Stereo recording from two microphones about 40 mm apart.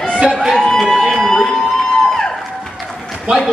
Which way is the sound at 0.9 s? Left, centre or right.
Centre.